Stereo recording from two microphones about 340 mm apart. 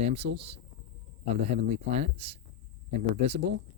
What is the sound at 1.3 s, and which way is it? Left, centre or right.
Speech, centre.